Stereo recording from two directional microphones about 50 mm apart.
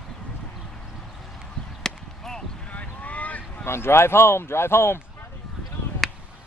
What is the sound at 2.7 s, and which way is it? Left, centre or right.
Boat, left.